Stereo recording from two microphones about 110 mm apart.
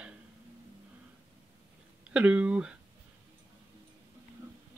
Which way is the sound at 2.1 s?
10° right (ahead or behind).